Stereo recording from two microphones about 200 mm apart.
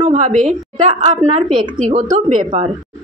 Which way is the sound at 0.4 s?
35° right (ahead or behind).